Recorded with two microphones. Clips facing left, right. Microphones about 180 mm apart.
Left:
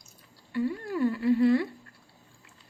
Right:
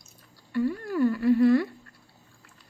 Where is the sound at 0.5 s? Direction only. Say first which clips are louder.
Right 3 dB; 25° left (ahead or behind).